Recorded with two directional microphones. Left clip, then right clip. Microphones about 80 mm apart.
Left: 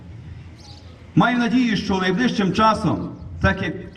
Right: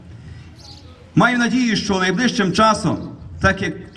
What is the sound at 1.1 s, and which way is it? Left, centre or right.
A man's voice, right.